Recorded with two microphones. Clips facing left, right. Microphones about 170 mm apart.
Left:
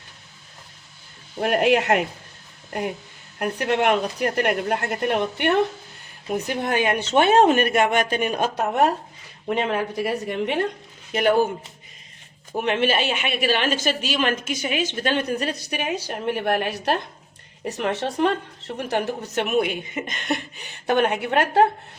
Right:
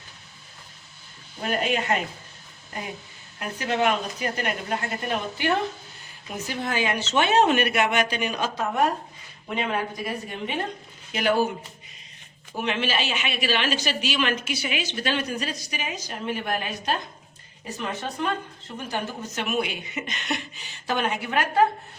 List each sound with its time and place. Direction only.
1.4 s speech: 65° left (ahead or behind)
3.3 s a woman's voice: 55° left (ahead or behind)
10.0 s speech: 65° left (ahead or behind)
11.1 s speech: 55° left (ahead or behind)
12.5 s a woman's voice: 55° left (ahead or behind); by 19.5 s 70° left (ahead or behind)
19.5 s a woman's voice: 50° left (ahead or behind)